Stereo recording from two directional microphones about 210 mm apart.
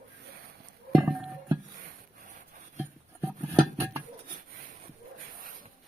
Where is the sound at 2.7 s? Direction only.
10° right (ahead or behind).